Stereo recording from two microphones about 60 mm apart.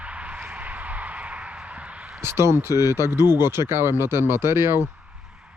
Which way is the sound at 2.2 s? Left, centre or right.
Right.